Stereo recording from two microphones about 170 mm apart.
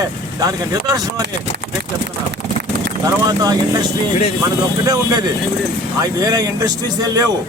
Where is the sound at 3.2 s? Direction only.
25° right (ahead or behind).